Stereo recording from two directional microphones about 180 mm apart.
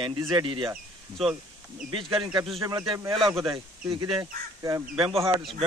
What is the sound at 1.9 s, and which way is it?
Speech, 30° right (ahead or behind).